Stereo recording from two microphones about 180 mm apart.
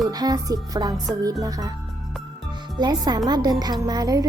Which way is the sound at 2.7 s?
25° right (ahead or behind).